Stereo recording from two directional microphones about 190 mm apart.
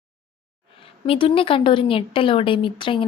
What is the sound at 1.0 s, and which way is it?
A woman's voice, 30° left (ahead or behind).